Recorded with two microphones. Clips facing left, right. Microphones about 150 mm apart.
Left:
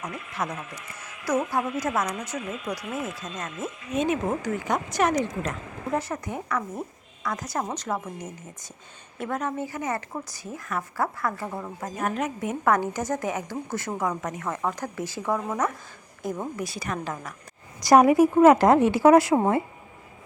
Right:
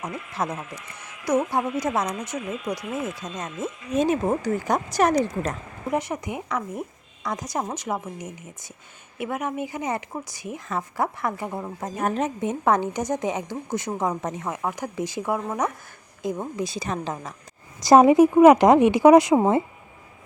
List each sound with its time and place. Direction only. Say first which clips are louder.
0.0 s a woman's voice: right 3 dB; 25° right (ahead or behind)
3.2 s a woman's voice: right 2 dB; 20° right (ahead or behind)
3.9 s speech: right 3 dB; 35° right (ahead or behind)
5.9 s a woman's voice: right 2 dB; 15° right (ahead or behind)
14.5 s a woman's voice: right 1 dB; 10° right (ahead or behind)